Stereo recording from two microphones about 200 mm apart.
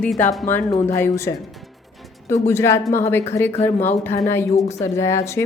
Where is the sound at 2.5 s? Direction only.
10° left (ahead or behind).